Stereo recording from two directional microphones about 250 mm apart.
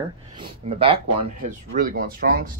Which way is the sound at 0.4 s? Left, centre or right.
Right.